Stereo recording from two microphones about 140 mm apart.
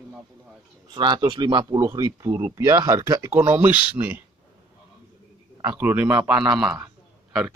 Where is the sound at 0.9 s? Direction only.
30° right (ahead or behind); by 4.2 s 15° right (ahead or behind).